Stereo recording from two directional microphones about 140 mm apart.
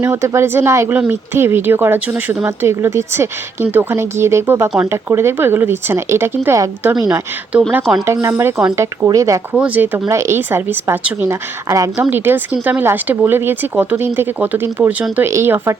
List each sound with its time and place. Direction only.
0.0 s speech: 20° right (ahead or behind)
8.0 s a woman's voice: 20° right (ahead or behind)
9.5 s a woman's voice: 10° right (ahead or behind)